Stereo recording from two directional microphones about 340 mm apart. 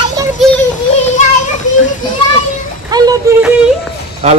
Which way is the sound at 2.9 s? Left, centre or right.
Centre.